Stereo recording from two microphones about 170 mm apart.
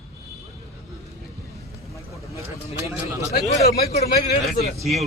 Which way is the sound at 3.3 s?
65° left (ahead or behind).